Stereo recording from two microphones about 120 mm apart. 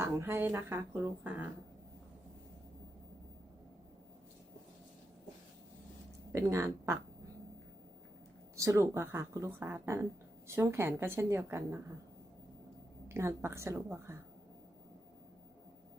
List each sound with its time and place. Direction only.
0.0 s speech: 20° right (ahead or behind)
6.3 s speech: 25° right (ahead or behind)
8.5 s speech: 25° right (ahead or behind)
13.1 s speech: 20° right (ahead or behind)